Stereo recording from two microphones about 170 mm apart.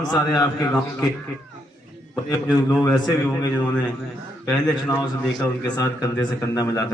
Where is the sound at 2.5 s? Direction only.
5° left (ahead or behind).